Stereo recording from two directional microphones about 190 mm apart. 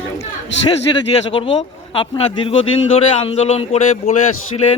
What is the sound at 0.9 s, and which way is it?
Speech, 20° left (ahead or behind).